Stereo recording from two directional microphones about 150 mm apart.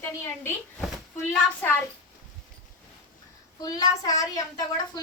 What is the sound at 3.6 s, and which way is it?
A child's voice, 25° left (ahead or behind).